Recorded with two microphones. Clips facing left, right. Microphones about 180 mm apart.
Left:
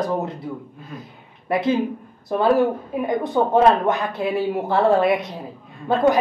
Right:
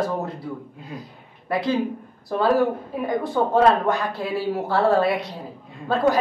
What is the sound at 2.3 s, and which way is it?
A woman's voice, 15° left (ahead or behind).